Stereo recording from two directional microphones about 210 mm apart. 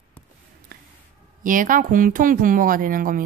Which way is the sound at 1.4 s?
40° right (ahead or behind).